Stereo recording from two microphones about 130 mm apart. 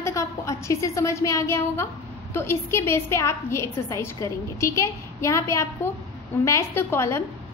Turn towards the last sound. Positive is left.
turn(degrees=20)  # may be behind; listen again after turning